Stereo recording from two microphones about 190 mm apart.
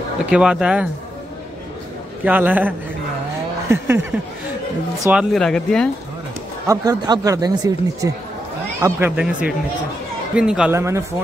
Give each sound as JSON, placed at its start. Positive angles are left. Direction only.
{"t": 0.3, "sound": "speech", "side_deg": -5}
{"t": 2.2, "sound": "speech", "side_deg": -10}
{"t": 3.6, "sound": "a sound", "side_deg": -15}
{"t": 5.1, "sound": "speech", "side_deg": 0}
{"t": 6.7, "sound": "speech", "side_deg": -20}
{"t": 8.8, "sound": "speech", "side_deg": -10}
{"t": 10.8, "sound": "speech", "side_deg": -15}